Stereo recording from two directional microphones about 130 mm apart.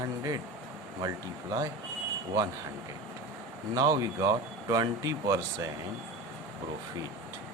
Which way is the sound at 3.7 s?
25° right (ahead or behind).